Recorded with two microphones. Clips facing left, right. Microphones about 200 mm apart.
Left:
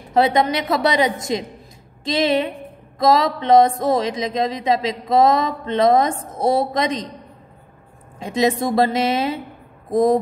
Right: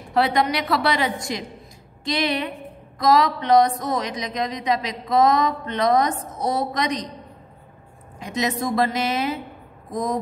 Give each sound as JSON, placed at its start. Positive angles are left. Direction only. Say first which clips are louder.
{"t": 0.1, "sound": "a woman's voice", "louder": "left 4 dB", "side_deg": 20}
{"t": 8.2, "sound": "a woman's voice", "louder": "left 6 dB", "side_deg": 30}